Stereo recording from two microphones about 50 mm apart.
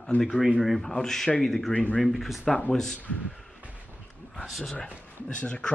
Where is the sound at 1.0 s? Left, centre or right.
Centre.